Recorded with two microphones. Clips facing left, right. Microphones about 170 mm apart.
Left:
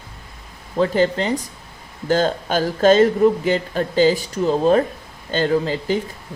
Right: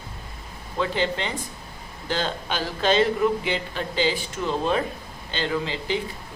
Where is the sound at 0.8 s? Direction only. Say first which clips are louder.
Left 7 dB; 40° left (ahead or behind).